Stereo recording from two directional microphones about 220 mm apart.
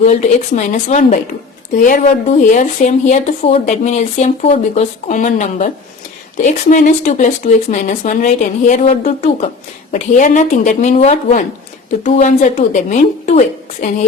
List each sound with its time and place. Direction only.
0.0 s speech: 30° left (ahead or behind)